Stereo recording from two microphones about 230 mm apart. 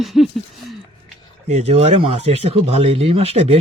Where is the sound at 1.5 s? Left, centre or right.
Right.